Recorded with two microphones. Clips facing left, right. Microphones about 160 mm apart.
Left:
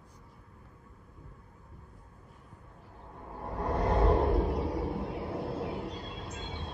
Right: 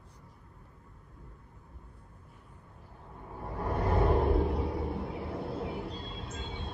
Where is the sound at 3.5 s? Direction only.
35° left (ahead or behind).